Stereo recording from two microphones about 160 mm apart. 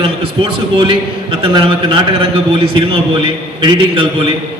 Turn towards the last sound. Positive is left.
turn(degrees=-30)  # may be behind; listen again after turning